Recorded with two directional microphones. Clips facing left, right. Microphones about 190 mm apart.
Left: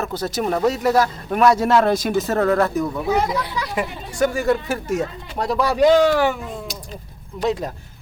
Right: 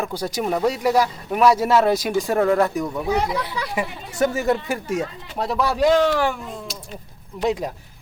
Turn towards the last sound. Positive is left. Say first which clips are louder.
# even
turn(degrees=-15)  # may be behind; listen again after turning